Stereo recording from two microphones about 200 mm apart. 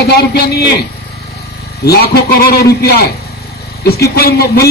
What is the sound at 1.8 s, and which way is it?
Speech, 50° left (ahead or behind).